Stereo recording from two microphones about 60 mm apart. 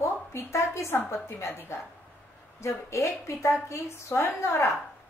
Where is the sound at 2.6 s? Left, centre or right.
Left.